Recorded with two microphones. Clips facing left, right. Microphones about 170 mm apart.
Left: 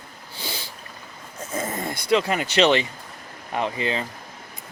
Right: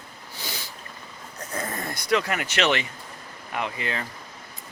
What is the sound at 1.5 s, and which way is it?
Speech, 25° left (ahead or behind).